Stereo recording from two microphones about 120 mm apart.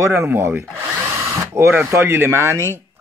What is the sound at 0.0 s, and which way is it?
A child's voice, 25° right (ahead or behind).